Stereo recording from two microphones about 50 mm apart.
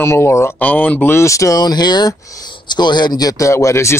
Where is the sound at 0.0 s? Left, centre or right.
Left.